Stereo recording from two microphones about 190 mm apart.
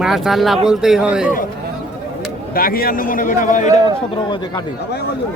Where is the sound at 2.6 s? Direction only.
50° left (ahead or behind).